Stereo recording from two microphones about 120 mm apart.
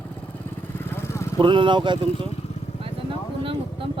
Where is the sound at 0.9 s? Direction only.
20° left (ahead or behind).